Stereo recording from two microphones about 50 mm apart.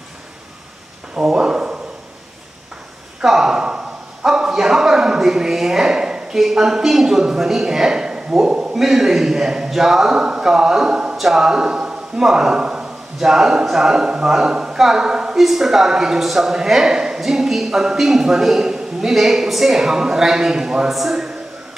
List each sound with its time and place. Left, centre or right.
1.1 s speech: centre
3.2 s a sound: centre
8.7 s a man's voice: centre
11.1 s a man's voice: centre
15.3 s a man's voice: centre